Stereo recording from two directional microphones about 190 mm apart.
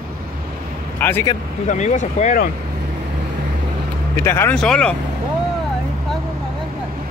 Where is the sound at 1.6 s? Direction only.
40° left (ahead or behind).